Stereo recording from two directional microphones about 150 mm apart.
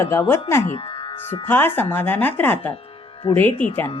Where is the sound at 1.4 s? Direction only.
15° left (ahead or behind).